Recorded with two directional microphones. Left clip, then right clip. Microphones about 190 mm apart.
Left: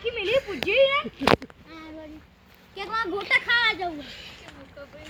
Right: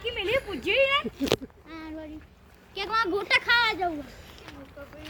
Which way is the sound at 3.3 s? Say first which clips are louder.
Left 2 dB; centre (ahead or behind).